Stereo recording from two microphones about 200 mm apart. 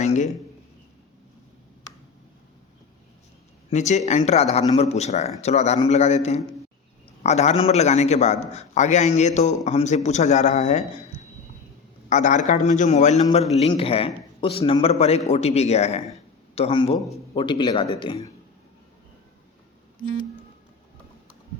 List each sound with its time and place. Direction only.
0.0 s a sound: 35° left (ahead or behind)
3.7 s a man's voice: 35° left (ahead or behind)
12.0 s a man's voice: 40° left (ahead or behind)